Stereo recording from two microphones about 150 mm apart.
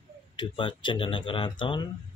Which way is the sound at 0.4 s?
35° left (ahead or behind).